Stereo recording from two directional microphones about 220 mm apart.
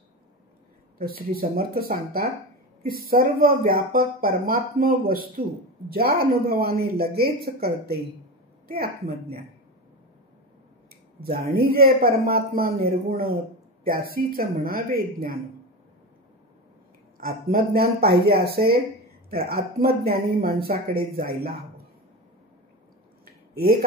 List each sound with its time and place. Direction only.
0.9 s speech: 45° right (ahead or behind)
8.6 s speech: 45° right (ahead or behind)
11.1 s speech: 45° right (ahead or behind)
17.2 s speech: 45° right (ahead or behind)
23.2 s a sound: 45° right (ahead or behind)